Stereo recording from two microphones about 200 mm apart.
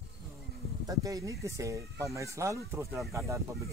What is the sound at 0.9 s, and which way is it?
Speech, 15° right (ahead or behind).